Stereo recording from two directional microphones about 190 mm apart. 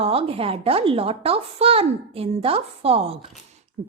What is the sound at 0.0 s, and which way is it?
A woman's voice, 30° right (ahead or behind).